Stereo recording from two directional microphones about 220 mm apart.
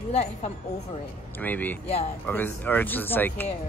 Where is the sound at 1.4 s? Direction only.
10° left (ahead or behind).